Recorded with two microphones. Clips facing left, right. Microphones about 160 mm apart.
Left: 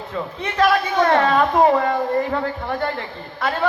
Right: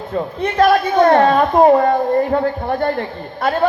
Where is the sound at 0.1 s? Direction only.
45° right (ahead or behind).